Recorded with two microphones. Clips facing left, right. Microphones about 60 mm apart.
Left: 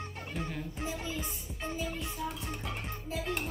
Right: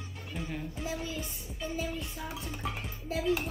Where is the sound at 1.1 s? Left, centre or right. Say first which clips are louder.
Even; left.